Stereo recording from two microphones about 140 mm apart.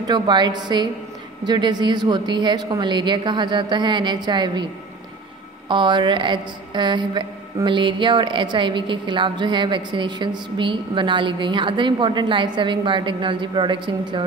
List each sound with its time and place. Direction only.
0.0 s a woman's voice: 30° right (ahead or behind)
5.7 s a woman's voice: 35° right (ahead or behind)